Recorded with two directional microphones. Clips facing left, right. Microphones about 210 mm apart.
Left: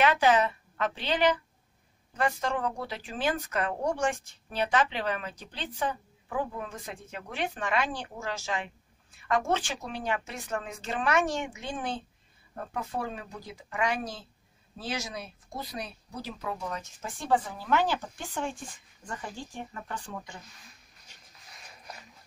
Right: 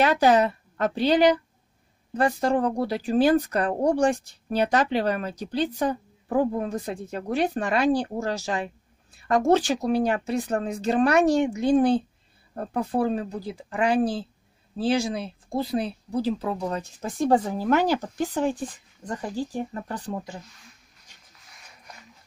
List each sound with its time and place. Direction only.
0.0 s speech: 40° right (ahead or behind)